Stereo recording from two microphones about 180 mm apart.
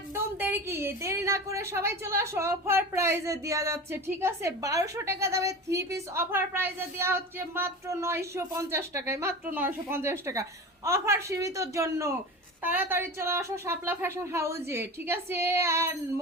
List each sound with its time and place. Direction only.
0.1 s a woman's voice: 10° right (ahead or behind)